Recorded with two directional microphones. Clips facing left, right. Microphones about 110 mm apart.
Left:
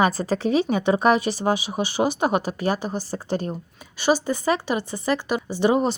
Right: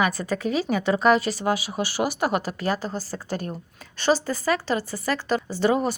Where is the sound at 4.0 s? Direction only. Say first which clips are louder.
Left 1 dB; 15° left (ahead or behind).